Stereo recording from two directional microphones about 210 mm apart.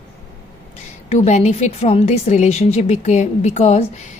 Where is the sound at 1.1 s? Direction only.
30° left (ahead or behind).